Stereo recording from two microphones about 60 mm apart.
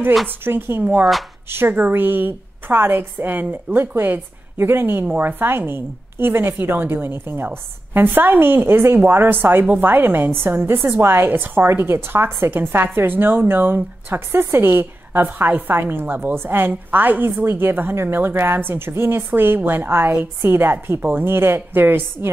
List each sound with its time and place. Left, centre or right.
0.3 s a woman's voice: right